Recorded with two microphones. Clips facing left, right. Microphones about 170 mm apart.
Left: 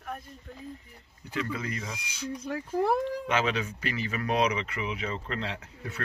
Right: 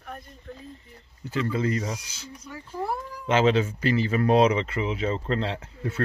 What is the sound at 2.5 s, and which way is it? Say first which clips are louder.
Speech: left 4 dB; 90° left.